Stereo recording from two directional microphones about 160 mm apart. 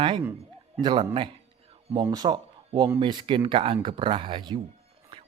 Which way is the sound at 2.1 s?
25° right (ahead or behind).